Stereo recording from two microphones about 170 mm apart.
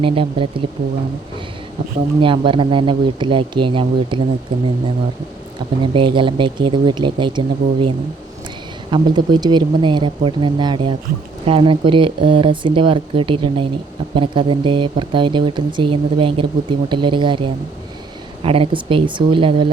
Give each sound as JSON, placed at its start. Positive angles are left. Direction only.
{"t": 0.0, "sound": "speech", "side_deg": -30}
{"t": 2.2, "sound": "speech", "side_deg": -30}
{"t": 5.5, "sound": "speech", "side_deg": -30}